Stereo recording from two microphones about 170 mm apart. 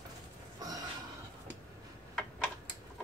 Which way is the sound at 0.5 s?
20° right (ahead or behind).